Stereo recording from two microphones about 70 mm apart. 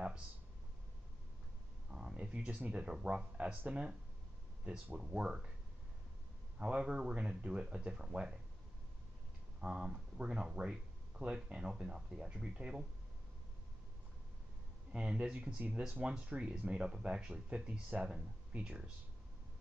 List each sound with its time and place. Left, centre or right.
1.9 s speech: centre
6.6 s speech: centre
9.6 s speech: centre
14.9 s speech: centre